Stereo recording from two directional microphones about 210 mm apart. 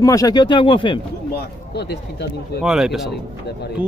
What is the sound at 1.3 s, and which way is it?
Speech, 50° left (ahead or behind).